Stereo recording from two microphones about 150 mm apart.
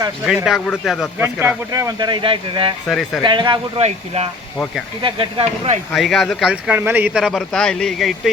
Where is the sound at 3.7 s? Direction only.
45° right (ahead or behind).